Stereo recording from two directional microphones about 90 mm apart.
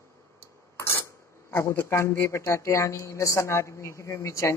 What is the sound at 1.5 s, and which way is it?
Speech, 25° left (ahead or behind).